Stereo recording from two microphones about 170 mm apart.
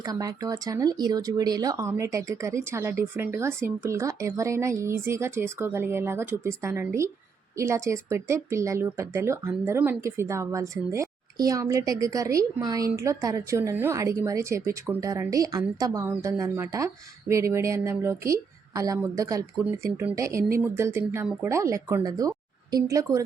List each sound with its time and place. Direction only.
0.0 s speech: 20° right (ahead or behind)